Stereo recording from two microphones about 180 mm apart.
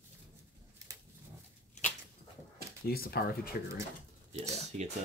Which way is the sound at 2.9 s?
60° left (ahead or behind).